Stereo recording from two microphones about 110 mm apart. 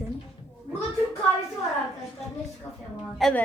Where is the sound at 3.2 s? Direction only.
Centre (ahead or behind).